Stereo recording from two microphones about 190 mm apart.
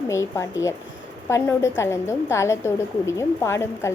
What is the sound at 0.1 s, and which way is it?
A woman's voice, 15° left (ahead or behind).